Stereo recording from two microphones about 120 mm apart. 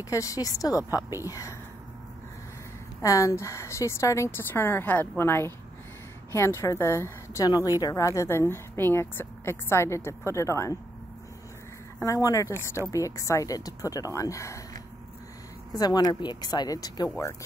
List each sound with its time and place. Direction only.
0.1 s a woman's voice: 25° left (ahead or behind)
3.0 s a woman's voice: 25° left (ahead or behind)
12.0 s a woman's voice: 30° left (ahead or behind)